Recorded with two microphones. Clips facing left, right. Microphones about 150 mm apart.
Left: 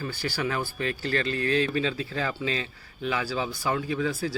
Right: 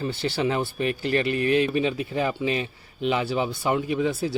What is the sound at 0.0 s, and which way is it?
A man's voice, 25° right (ahead or behind).